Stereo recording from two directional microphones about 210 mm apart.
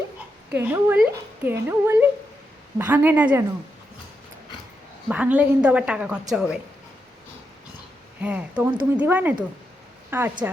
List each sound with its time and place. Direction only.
0.5 s a woman's voice: 10° right (ahead or behind)
5.0 s a woman's voice: 5° right (ahead or behind)
8.2 s a woman's voice: 5° right (ahead or behind)